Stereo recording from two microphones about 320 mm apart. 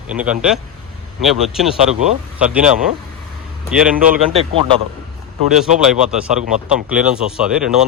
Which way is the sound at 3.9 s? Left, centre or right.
Right.